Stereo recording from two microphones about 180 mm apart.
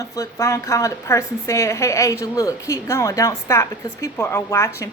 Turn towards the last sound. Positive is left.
turn(degrees=15)  # may be behind; listen again after turning